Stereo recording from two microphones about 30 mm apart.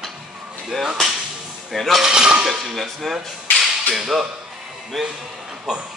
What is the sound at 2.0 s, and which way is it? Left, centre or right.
Speech, right.